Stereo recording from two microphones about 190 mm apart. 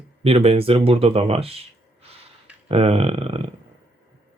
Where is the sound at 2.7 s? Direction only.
30° right (ahead or behind).